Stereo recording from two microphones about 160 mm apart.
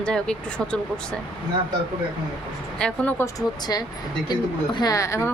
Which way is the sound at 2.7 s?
5° left (ahead or behind).